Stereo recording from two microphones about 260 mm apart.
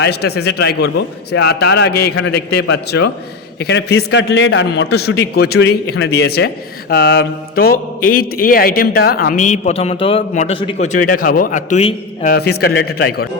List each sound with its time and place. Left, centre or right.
0.0 s a man's voice: left
12.3 s a man's voice: left